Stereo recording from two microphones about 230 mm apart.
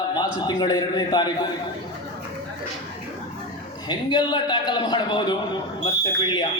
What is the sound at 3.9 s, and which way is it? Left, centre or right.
A man's voice, centre.